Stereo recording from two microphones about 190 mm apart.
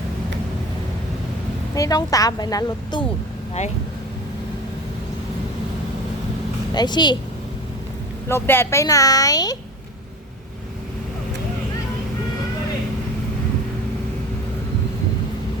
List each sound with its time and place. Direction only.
1.7 s speech: 20° left (ahead or behind)
6.7 s speech: 25° left (ahead or behind)
8.3 s speech: 15° left (ahead or behind)